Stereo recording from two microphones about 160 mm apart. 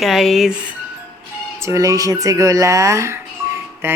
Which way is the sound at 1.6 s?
20° right (ahead or behind).